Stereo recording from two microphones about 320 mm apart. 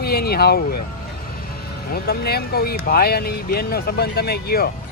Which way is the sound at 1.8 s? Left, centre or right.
Left.